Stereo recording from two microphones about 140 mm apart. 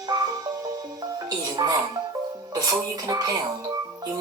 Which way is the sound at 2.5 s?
25° right (ahead or behind).